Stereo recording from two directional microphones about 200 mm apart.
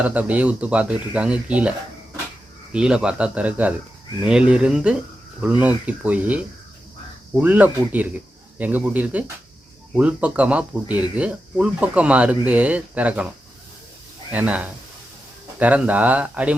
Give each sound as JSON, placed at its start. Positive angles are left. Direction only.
{"t": 0.0, "sound": "speech", "side_deg": -5}
{"t": 2.7, "sound": "speech", "side_deg": -5}
{"t": 14.3, "sound": "speech", "side_deg": -5}